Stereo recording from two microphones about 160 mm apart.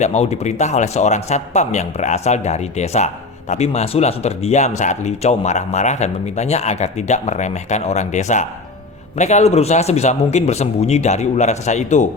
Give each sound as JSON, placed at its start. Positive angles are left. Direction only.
{"t": 0.0, "sound": "speech", "side_deg": 45}